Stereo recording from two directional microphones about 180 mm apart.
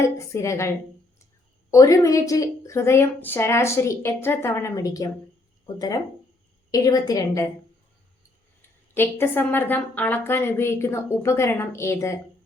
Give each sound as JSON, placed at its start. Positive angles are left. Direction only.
{"t": 0.0, "sound": "a woman's voice", "side_deg": 15}
{"t": 1.7, "sound": "a woman's voice", "side_deg": 20}
{"t": 9.0, "sound": "a woman's voice", "side_deg": 10}